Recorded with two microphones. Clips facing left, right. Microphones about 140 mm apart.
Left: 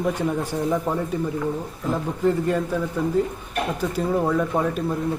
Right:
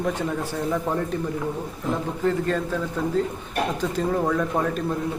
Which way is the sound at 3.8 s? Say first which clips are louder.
Left 3 dB; 5° left (ahead or behind).